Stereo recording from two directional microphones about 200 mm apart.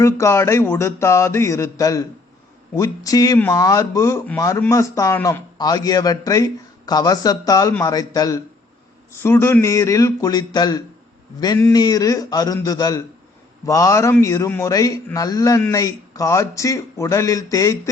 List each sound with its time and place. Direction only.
0.0 s speech: 15° left (ahead or behind)
11.3 s a sound: 20° left (ahead or behind)
13.7 s speech: 15° left (ahead or behind)